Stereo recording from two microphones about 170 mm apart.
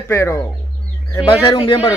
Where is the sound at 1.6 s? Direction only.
20° left (ahead or behind).